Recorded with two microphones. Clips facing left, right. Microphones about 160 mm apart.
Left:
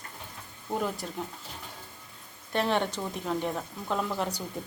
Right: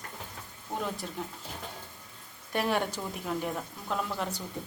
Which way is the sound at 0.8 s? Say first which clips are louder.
Even; centre (ahead or behind).